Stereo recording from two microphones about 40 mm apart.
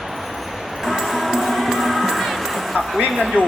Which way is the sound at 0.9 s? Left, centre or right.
Centre.